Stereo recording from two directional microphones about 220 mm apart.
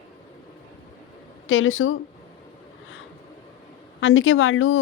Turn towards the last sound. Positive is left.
turn(degrees=65)  # may be behind; listen again after turning